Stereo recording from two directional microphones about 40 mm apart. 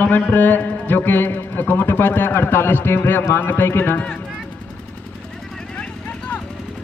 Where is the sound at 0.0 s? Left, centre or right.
Left.